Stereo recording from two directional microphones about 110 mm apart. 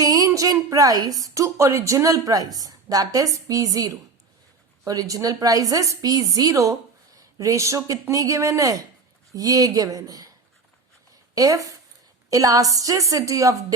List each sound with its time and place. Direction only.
0.0 s a sound: 35° right (ahead or behind)
0.3 s a woman's voice: 30° right (ahead or behind)
11.3 s a woman's voice: 30° right (ahead or behind)